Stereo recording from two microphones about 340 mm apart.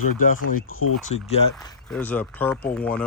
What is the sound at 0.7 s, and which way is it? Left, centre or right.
Speech, left.